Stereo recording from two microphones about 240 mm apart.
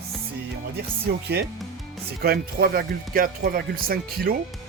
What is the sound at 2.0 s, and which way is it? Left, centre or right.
Speech, right.